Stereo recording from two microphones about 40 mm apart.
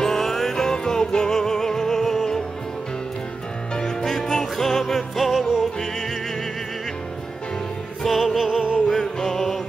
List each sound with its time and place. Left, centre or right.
0.0 s music: centre
3.7 s music: centre
8.0 s music: centre
8.4 s music: centre
8.8 s music: centre